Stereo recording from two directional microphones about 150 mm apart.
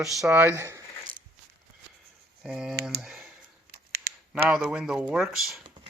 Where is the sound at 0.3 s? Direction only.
15° right (ahead or behind).